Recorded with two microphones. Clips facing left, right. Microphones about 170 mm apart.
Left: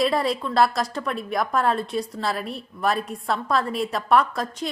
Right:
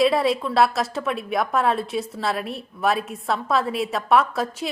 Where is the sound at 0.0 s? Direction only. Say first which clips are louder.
Right 3 dB; centre (ahead or behind).